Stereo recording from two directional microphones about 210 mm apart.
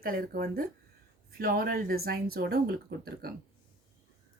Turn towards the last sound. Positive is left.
turn(degrees=-45)  # may be behind; listen again after turning